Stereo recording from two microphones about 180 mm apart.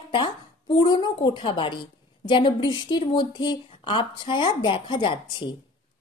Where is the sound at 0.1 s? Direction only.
25° left (ahead or behind).